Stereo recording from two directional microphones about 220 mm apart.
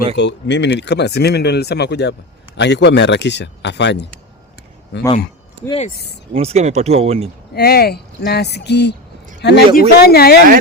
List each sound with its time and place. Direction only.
0.2 s speech: 55° left (ahead or behind)
5.6 s speech: 25° left (ahead or behind)
6.3 s speech: 30° right (ahead or behind)
7.5 s speech: 45° left (ahead or behind)